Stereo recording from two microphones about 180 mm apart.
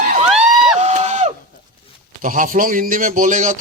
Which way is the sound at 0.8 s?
40° right (ahead or behind).